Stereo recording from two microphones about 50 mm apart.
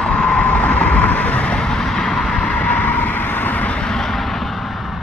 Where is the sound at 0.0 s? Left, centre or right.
Centre.